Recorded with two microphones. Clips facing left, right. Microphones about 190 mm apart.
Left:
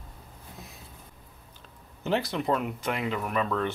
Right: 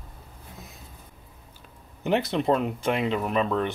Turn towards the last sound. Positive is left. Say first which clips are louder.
# right 3 dB
turn(degrees=-20)  # may be behind; listen again after turning